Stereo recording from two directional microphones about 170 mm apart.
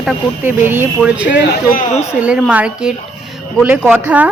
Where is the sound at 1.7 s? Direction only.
50° left (ahead or behind).